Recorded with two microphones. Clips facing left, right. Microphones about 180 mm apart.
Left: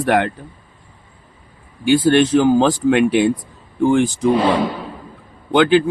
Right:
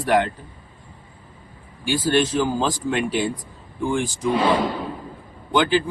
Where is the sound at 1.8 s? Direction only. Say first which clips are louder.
Left 7 dB; 60° left (ahead or behind).